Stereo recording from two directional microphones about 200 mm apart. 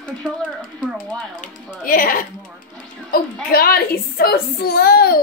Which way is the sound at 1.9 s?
45° left (ahead or behind).